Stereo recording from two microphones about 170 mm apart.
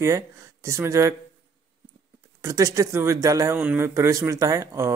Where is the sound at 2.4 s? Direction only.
20° right (ahead or behind).